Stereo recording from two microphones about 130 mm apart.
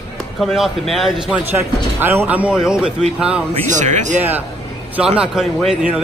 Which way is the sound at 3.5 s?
65° right (ahead or behind).